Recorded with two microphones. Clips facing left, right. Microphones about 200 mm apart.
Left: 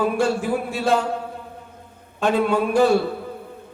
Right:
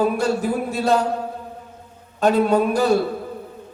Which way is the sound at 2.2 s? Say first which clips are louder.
Right 3 dB; 40° right (ahead or behind).